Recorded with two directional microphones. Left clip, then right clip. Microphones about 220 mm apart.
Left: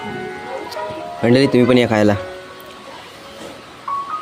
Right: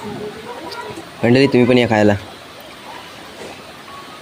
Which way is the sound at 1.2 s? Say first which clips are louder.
Right 1 dB; centre (ahead or behind).